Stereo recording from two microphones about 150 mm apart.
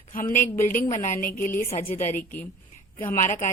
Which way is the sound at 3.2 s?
55° left (ahead or behind).